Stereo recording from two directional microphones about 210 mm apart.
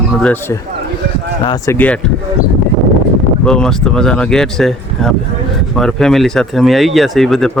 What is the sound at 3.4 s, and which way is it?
Speech, 5° left (ahead or behind).